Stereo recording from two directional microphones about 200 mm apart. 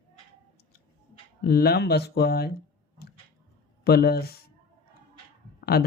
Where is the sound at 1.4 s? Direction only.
50° left (ahead or behind).